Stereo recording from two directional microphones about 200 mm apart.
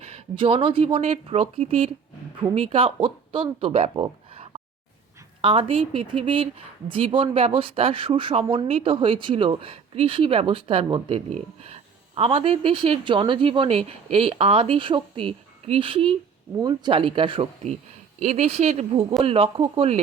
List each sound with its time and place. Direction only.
0.0 s speech: 30° right (ahead or behind)